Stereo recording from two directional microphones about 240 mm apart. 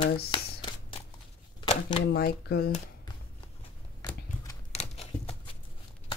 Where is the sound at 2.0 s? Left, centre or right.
Left.